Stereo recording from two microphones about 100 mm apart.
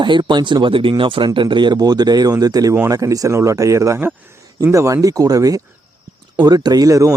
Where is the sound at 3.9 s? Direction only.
20° right (ahead or behind).